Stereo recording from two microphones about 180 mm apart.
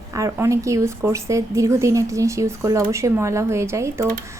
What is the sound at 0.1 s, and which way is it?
A woman's voice, 20° right (ahead or behind).